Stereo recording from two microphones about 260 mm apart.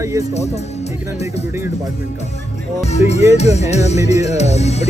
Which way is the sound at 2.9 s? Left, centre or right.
Left.